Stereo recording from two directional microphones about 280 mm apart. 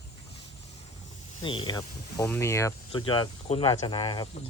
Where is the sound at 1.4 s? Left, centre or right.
Centre.